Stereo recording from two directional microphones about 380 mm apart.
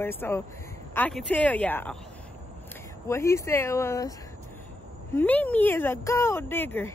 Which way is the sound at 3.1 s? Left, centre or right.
Centre.